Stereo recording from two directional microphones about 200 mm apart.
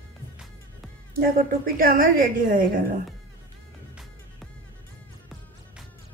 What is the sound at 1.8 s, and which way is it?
A woman's voice, 45° right (ahead or behind).